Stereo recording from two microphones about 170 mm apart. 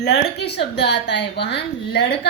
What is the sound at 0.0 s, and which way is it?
A woman's voice, 80° left.